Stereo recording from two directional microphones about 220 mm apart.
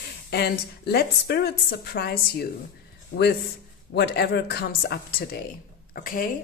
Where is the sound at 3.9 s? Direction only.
50° left (ahead or behind).